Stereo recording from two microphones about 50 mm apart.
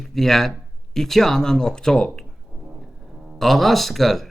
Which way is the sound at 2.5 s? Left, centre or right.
Right.